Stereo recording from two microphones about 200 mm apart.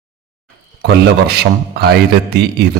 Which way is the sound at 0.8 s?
55° right (ahead or behind).